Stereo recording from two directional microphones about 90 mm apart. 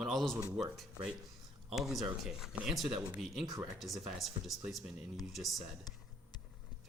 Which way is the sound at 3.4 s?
40° right (ahead or behind).